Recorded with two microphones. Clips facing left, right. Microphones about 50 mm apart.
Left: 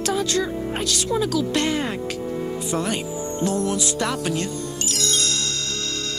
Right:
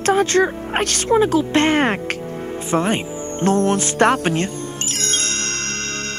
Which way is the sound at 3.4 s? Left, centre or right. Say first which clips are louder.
Right 7 dB; right.